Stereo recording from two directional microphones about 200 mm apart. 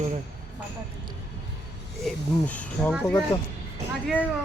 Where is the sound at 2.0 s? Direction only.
5° left (ahead or behind).